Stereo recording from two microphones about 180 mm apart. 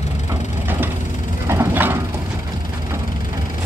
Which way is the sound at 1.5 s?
10° right (ahead or behind).